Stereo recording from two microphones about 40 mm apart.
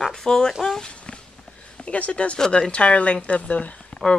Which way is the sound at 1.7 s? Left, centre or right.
Left.